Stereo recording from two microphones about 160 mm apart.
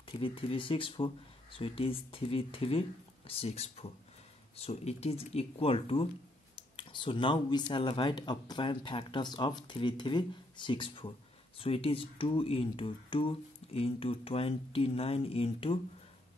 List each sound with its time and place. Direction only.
0.0 s speech: 35° left (ahead or behind)